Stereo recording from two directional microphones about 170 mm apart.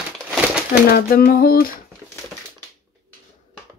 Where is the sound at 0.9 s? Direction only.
60° left (ahead or behind).